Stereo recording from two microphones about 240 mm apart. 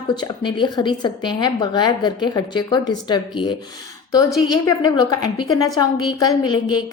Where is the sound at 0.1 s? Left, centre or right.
Centre.